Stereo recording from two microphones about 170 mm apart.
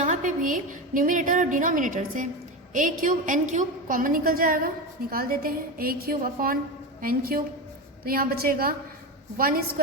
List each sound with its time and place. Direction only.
0.0 s a woman's voice: 50° right (ahead or behind)